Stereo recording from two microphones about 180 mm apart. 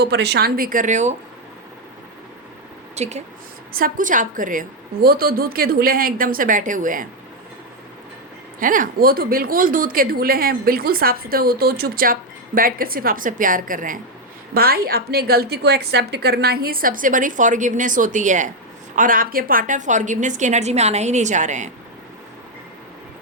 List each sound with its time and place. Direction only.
0.0 s a woman's voice: 65° right (ahead or behind); by 1.1 s 40° right (ahead or behind)
2.9 s speech: 35° right (ahead or behind)
3.7 s a woman's voice: 55° right (ahead or behind)
8.5 s a woman's voice: 50° right (ahead or behind)